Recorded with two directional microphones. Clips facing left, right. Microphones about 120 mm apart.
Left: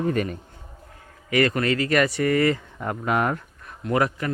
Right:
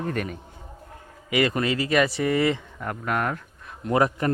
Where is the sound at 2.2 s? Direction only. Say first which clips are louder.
Left 2 dB; 15° right (ahead or behind).